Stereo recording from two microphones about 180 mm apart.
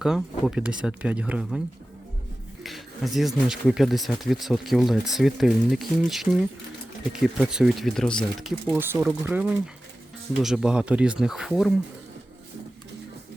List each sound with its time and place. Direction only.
0.0 s speech: 5° right (ahead or behind)
2.6 s speech: centre (ahead or behind)
8.7 s speech: 10° right (ahead or behind)